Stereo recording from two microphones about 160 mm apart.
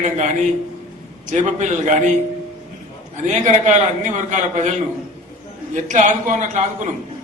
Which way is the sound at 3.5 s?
50° right (ahead or behind).